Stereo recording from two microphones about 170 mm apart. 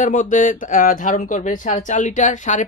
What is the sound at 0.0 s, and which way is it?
Speech, 50° left (ahead or behind).